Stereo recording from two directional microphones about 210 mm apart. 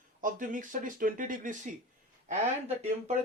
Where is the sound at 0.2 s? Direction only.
40° right (ahead or behind).